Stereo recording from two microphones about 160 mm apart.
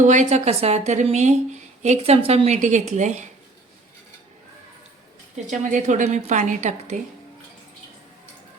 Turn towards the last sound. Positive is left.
turn(degrees=-50)  # may be behind; listen again after turning